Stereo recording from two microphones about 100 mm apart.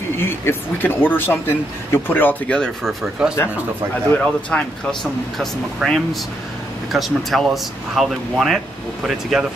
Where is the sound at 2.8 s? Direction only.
5° right (ahead or behind).